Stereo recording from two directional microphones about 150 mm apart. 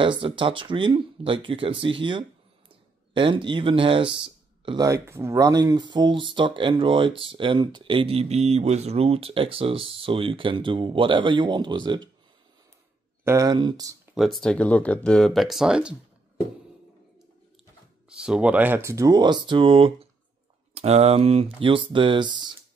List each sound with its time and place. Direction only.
0.0 s speech: 35° right (ahead or behind)
4.8 s speech: 20° right (ahead or behind)
13.2 s speech: 20° right (ahead or behind)
14.1 s speech: centre (ahead or behind)
18.1 s speech: 5° right (ahead or behind); by 22.5 s 30° right (ahead or behind)